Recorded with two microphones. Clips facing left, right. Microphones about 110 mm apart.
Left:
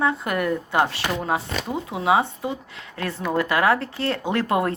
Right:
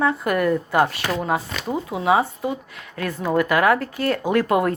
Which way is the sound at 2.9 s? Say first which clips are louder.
Right 3 dB; 30° left (ahead or behind).